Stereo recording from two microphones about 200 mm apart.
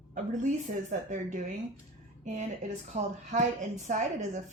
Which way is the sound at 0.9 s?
40° right (ahead or behind).